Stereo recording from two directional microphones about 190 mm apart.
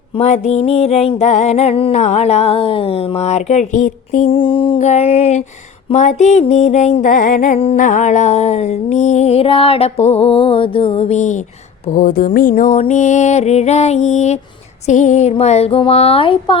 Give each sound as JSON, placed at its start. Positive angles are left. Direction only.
{"t": 0.2, "sound": "music", "side_deg": 35}
{"t": 4.3, "sound": "music", "side_deg": 30}